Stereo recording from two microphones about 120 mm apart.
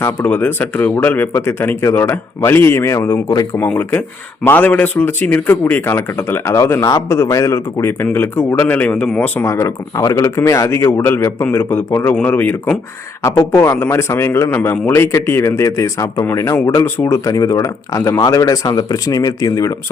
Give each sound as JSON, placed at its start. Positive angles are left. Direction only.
{"t": 0.0, "sound": "speech", "side_deg": 15}
{"t": 4.4, "sound": "speech", "side_deg": 15}